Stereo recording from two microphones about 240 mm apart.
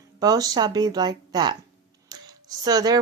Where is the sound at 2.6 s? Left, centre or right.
Centre.